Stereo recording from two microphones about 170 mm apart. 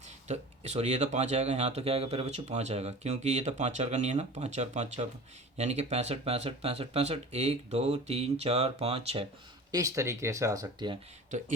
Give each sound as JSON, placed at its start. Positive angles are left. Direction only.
{"t": 0.3, "sound": "speech", "side_deg": -40}
{"t": 9.7, "sound": "speech", "side_deg": -20}